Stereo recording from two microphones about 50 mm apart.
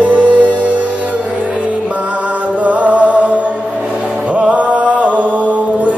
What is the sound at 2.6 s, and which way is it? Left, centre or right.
Music, right.